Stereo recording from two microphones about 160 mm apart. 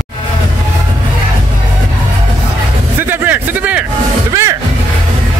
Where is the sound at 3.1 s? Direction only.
10° right (ahead or behind).